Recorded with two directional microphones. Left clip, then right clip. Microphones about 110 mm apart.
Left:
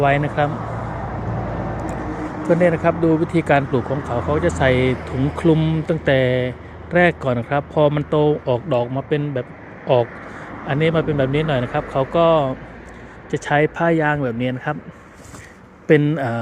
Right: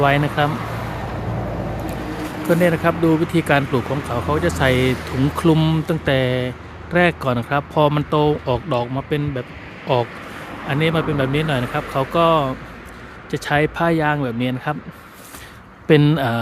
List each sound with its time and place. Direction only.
0.0 s speech: 45° right (ahead or behind)
0.5 s vehicle: centre (ahead or behind)
2.5 s speech: 40° right (ahead or behind)
4.9 s speech: 5° left (ahead or behind)
5.5 s speech: 70° right (ahead or behind)
5.9 s speech: 35° right (ahead or behind)
16.1 s speech: 40° right (ahead or behind)